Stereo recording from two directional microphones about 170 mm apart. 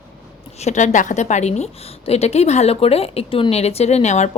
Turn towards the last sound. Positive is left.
turn(degrees=40)  # may be behind; listen again after turning